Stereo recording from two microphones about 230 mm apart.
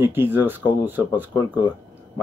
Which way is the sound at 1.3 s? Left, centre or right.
Centre.